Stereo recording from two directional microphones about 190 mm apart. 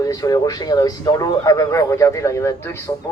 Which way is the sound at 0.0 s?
20° left (ahead or behind).